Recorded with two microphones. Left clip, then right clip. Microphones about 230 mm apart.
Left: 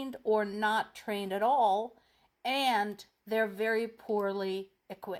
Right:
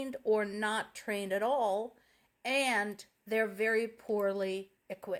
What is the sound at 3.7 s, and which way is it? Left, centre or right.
Speech, left.